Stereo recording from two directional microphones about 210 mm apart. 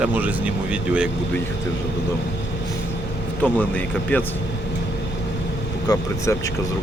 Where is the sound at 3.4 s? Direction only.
5° left (ahead or behind).